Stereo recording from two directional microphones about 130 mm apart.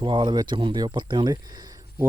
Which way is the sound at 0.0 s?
40° right (ahead or behind).